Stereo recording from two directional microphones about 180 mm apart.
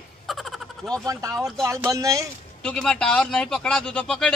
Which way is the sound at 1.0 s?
20° right (ahead or behind).